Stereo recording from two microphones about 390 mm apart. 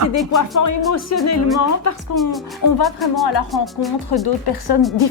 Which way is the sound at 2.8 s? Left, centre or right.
Centre.